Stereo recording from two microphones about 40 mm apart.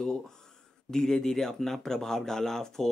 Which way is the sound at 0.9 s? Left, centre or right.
Centre.